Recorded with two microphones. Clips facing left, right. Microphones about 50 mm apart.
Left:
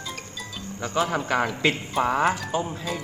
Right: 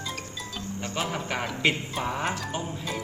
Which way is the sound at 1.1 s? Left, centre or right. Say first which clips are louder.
Left 6 dB; left.